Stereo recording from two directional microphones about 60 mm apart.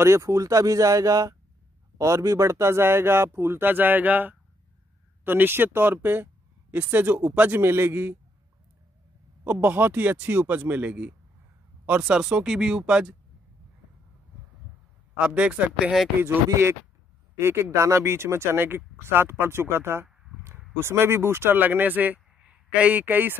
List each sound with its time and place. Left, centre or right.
0.0 s speech: right
2.0 s speech: right
9.4 s speech: right; by 13.1 s centre
15.1 s speech: centre
15.8 s speech: centre
16.4 s speech: right